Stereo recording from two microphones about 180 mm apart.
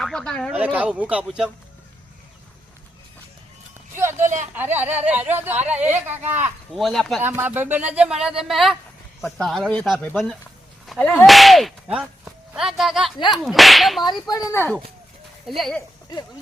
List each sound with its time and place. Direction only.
0.0 s speech: 5° left (ahead or behind)
0.5 s speech: 10° right (ahead or behind)
3.9 s a sound: 15° right (ahead or behind)
4.5 s speech: 10° right (ahead or behind)
6.7 s speech: centre (ahead or behind)
7.2 s speech: 10° right (ahead or behind)
14.0 s speech: 20° left (ahead or behind)
14.5 s speech: 10° left (ahead or behind)
15.4 s speech: centre (ahead or behind)